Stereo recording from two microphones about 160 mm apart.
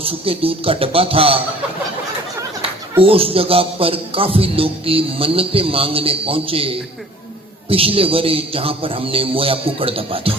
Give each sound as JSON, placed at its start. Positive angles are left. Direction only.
{"t": 0.0, "sound": "a man's voice", "side_deg": -35}
{"t": 3.0, "sound": "a man's voice", "side_deg": -35}